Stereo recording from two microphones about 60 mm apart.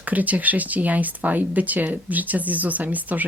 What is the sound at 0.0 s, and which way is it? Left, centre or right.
Speech, right.